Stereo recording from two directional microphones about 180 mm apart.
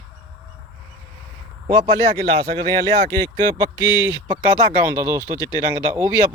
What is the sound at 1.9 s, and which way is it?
Speech, 15° left (ahead or behind).